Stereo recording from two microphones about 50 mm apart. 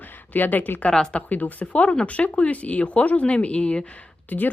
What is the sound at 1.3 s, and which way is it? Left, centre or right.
Speech, left.